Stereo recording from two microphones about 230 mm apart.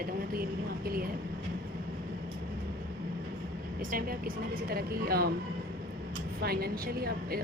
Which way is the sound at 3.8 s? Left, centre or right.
Right.